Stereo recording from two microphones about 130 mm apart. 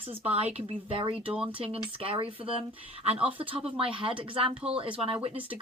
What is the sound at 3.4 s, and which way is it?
Speech, 45° right (ahead or behind).